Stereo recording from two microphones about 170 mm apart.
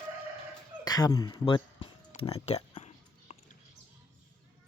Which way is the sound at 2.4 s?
40° left (ahead or behind).